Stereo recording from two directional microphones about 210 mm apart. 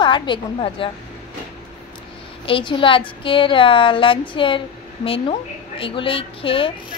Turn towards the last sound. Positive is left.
turn(degrees=25)  # may be behind; listen again after turning